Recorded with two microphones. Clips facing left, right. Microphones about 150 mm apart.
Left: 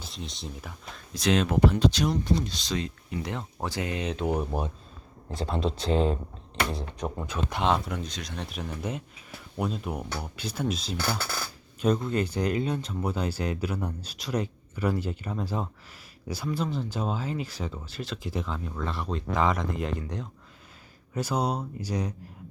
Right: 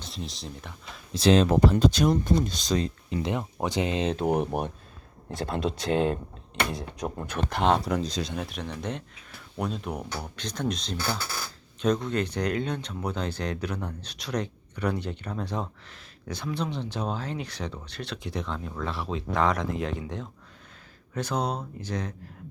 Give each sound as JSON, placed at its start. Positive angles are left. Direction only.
{"t": 0.0, "sound": "speech", "side_deg": 0}
{"t": 1.1, "sound": "speech", "side_deg": -30}
{"t": 1.7, "sound": "speech", "side_deg": -50}
{"t": 3.2, "sound": "speech", "side_deg": -20}
{"t": 4.1, "sound": "speech", "side_deg": -45}
{"t": 4.4, "sound": "speech", "side_deg": -65}
{"t": 5.9, "sound": "speech", "side_deg": -60}
{"t": 7.3, "sound": "speech", "side_deg": -60}
{"t": 7.7, "sound": "speech", "side_deg": -40}
{"t": 8.4, "sound": "speech", "side_deg": 0}